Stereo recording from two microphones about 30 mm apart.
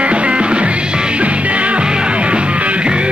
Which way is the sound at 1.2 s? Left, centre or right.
Right.